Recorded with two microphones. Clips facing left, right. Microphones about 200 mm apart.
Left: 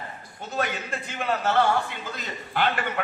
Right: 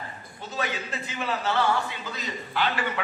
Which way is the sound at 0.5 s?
50° left (ahead or behind).